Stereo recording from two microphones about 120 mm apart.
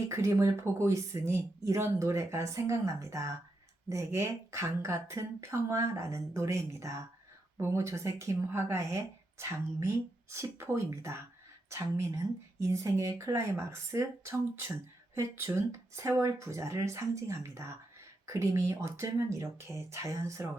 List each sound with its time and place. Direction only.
0.1 s a woman's voice: 25° right (ahead or behind)